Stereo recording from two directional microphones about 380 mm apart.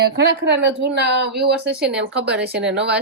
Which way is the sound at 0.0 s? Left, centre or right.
Right.